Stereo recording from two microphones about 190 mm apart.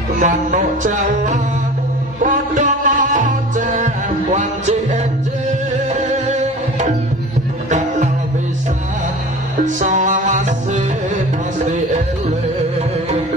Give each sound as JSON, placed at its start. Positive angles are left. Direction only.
{"t": 0.2, "sound": "music", "side_deg": -40}
{"t": 9.8, "sound": "music", "side_deg": -40}